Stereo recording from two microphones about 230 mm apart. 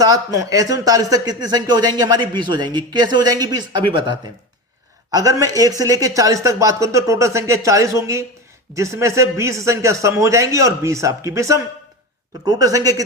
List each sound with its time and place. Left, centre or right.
0.0 s speech: centre